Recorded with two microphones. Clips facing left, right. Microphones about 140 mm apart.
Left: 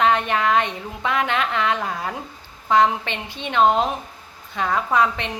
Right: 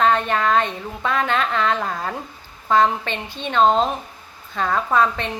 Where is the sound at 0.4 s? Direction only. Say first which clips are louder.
Right 1 dB; 15° left (ahead or behind).